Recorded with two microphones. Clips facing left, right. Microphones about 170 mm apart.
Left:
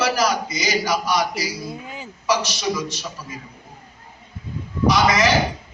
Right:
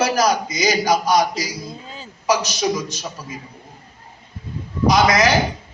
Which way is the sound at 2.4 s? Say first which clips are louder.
Right 3 dB; 45° right (ahead or behind).